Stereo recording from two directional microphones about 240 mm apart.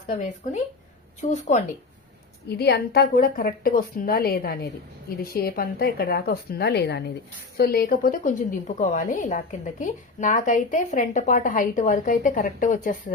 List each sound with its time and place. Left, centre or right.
1.3 s speech: left
2.5 s a woman's voice: left